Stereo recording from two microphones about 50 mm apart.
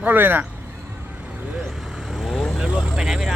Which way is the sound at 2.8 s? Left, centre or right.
Centre.